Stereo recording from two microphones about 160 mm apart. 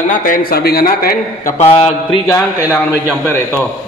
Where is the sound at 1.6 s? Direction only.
40° left (ahead or behind).